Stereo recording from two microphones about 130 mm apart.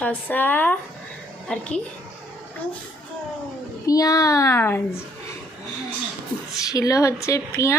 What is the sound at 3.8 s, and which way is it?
Speech, 25° left (ahead or behind).